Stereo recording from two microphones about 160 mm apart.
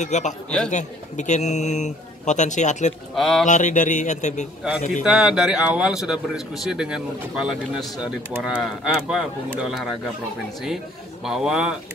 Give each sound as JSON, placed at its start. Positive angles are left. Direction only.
{"t": 0.0, "sound": "a man's voice", "side_deg": 45}
{"t": 3.2, "sound": "speech", "side_deg": 0}
{"t": 3.4, "sound": "a man's voice", "side_deg": 50}
{"t": 5.0, "sound": "speech", "side_deg": -5}
{"t": 11.2, "sound": "speech", "side_deg": -5}